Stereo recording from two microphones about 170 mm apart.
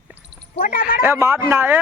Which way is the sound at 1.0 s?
15° right (ahead or behind).